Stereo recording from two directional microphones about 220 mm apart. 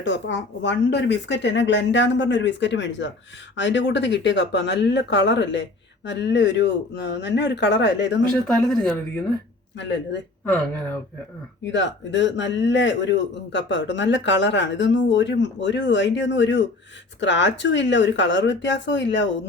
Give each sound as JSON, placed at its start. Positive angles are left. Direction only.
{"t": 0.0, "sound": "a man's voice", "side_deg": 55}
{"t": 8.5, "sound": "speech", "side_deg": 0}
{"t": 9.7, "sound": "a man's voice", "side_deg": 55}
{"t": 11.6, "sound": "a man's voice", "side_deg": 55}